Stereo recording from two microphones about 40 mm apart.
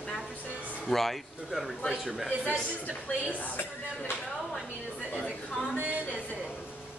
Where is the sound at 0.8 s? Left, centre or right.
Centre.